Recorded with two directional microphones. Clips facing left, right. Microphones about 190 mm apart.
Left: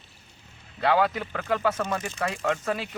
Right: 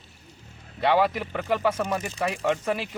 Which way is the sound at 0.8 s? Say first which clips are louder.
Right 1 dB; 10° right (ahead or behind).